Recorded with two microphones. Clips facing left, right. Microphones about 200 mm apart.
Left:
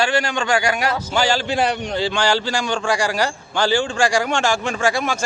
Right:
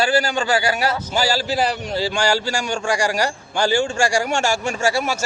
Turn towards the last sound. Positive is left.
turn(degrees=-10)  # may be behind; listen again after turning